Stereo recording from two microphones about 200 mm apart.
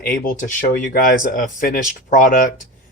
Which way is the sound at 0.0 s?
45° left (ahead or behind).